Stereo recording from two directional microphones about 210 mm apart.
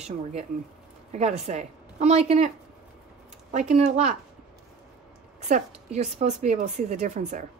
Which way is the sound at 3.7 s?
30° right (ahead or behind).